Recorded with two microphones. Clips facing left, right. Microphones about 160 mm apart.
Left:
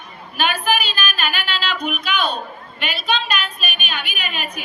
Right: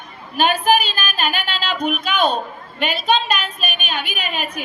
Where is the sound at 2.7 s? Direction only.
45° right (ahead or behind).